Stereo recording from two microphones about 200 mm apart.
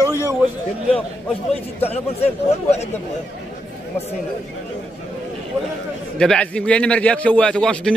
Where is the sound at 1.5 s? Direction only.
30° left (ahead or behind).